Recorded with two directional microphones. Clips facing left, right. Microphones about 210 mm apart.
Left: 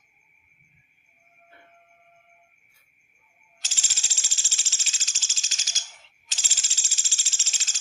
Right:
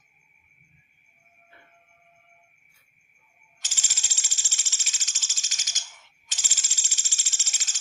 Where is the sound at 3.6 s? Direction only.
30° left (ahead or behind).